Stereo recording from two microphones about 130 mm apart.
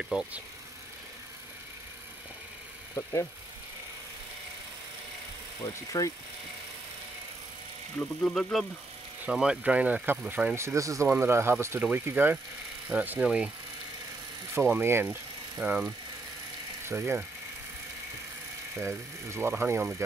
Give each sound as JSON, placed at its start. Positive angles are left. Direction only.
{"t": 0.0, "sound": "speech", "side_deg": -5}
{"t": 3.0, "sound": "speech", "side_deg": 20}
{"t": 5.6, "sound": "speech", "side_deg": 25}
{"t": 8.0, "sound": "speech", "side_deg": 5}
{"t": 10.5, "sound": "speech", "side_deg": -20}
{"t": 14.5, "sound": "speech", "side_deg": -20}
{"t": 18.8, "sound": "speech", "side_deg": -20}